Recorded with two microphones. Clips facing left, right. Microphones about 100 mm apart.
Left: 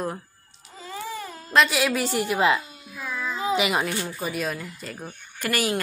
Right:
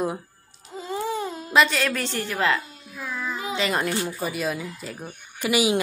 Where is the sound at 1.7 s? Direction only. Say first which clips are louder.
Left 2 dB; 10° left (ahead or behind).